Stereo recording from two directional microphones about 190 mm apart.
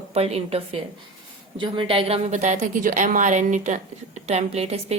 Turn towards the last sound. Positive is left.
turn(degrees=-35)  # may be behind; listen again after turning